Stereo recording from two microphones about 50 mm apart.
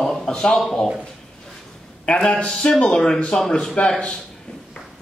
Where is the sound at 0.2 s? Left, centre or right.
Centre.